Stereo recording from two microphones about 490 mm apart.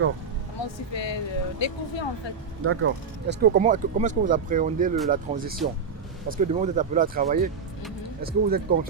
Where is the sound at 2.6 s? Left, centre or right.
Right.